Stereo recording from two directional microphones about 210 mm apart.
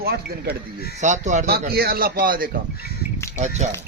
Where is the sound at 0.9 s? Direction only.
35° right (ahead or behind).